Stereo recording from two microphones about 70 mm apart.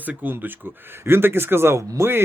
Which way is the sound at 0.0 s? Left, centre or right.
Right.